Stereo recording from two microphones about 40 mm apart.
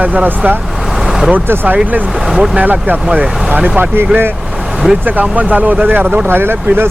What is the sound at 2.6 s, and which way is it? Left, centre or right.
Speech, right.